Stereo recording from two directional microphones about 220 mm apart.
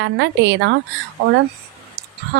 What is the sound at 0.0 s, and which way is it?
Speech, 55° right (ahead or behind).